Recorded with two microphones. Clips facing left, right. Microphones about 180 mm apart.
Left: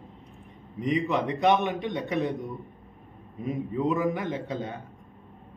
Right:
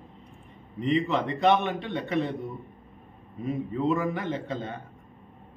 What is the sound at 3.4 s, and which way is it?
A man's voice, 10° left (ahead or behind).